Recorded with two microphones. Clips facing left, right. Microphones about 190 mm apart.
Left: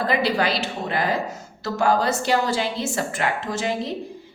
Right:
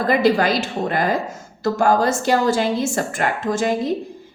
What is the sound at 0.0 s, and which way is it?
A woman's voice, 45° right (ahead or behind).